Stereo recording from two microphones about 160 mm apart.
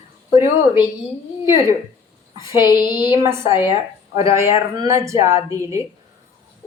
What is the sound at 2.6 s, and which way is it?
Speech, 25° left (ahead or behind).